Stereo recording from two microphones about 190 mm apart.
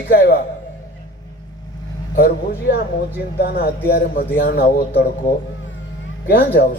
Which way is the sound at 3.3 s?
55° left (ahead or behind).